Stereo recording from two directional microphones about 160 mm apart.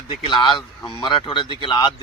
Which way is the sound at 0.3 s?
30° left (ahead or behind).